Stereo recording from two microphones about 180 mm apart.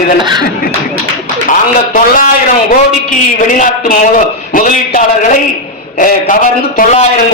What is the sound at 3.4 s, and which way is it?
A man's voice, 45° left (ahead or behind).